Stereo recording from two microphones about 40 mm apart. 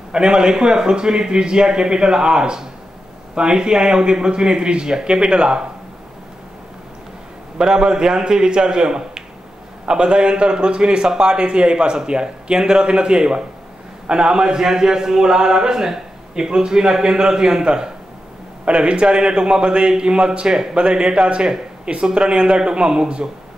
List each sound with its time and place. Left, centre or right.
0.1 s a man's voice: right
7.5 s a man's voice: centre